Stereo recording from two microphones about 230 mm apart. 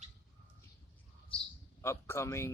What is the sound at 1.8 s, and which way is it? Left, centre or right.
Speech, centre.